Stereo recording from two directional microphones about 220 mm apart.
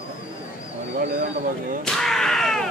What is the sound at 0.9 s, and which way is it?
Bird, 45° right (ahead or behind).